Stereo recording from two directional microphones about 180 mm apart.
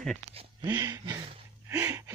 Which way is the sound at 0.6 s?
20° right (ahead or behind).